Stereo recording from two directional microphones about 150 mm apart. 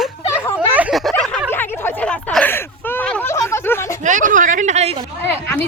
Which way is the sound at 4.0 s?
55° right (ahead or behind).